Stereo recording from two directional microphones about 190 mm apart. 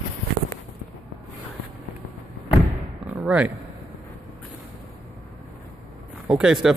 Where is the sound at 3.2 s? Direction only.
5° right (ahead or behind).